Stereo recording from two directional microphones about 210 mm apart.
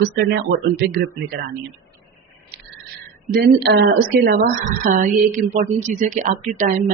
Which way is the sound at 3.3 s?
50° right (ahead or behind).